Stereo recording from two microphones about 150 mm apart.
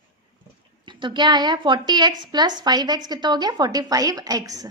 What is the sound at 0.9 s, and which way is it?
A woman's voice, 30° right (ahead or behind).